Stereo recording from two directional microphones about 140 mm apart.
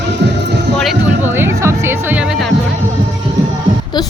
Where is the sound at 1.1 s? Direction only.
15° right (ahead or behind).